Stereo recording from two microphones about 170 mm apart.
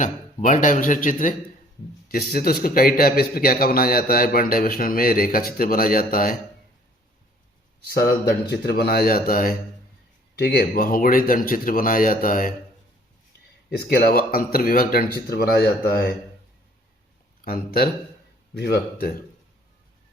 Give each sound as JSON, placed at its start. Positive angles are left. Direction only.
{"t": 0.0, "sound": "a man's voice", "side_deg": 45}
{"t": 2.0, "sound": "a man's voice", "side_deg": 60}
{"t": 7.9, "sound": "a man's voice", "side_deg": 65}
{"t": 13.7, "sound": "a man's voice", "side_deg": 65}
{"t": 17.4, "sound": "speech", "side_deg": 60}
{"t": 18.5, "sound": "speech", "side_deg": 70}